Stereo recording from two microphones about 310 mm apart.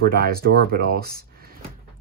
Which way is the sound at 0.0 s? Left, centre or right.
Right.